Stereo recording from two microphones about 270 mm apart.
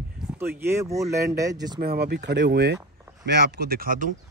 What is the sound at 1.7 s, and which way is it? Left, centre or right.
Speech, right.